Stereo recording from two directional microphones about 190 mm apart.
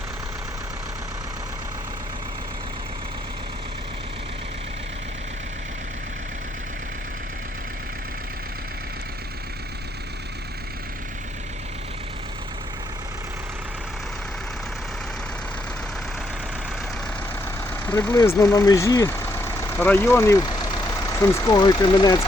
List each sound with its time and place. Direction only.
17.8 s speech: 10° left (ahead or behind)